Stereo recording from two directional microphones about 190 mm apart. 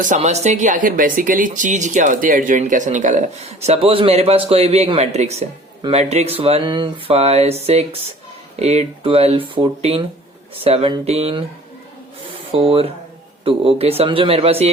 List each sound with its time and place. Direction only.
0.0 s speech: 40° right (ahead or behind)
12.5 s speech: 30° right (ahead or behind)